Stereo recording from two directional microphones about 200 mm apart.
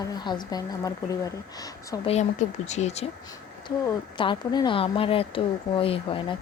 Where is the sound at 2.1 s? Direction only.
35° left (ahead or behind).